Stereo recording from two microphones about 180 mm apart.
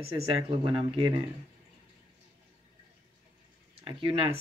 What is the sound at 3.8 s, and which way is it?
Speech, 30° right (ahead or behind).